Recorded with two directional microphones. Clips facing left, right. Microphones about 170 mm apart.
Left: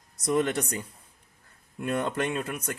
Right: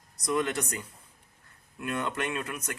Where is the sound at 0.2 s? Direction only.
30° left (ahead or behind).